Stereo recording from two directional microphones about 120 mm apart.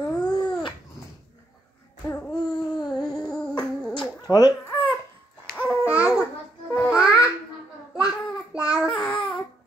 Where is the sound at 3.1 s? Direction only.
5° left (ahead or behind).